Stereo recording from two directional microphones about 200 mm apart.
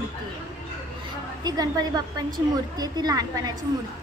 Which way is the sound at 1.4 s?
20° right (ahead or behind).